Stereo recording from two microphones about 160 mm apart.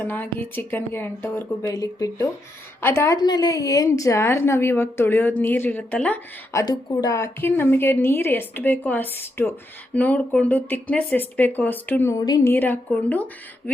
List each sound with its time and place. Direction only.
0.0 s a woman's voice: 10° left (ahead or behind)
6.6 s a woman's voice: 20° left (ahead or behind)
12.5 s a woman's voice: 10° left (ahead or behind)